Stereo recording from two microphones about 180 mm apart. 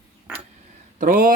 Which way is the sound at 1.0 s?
50° right (ahead or behind).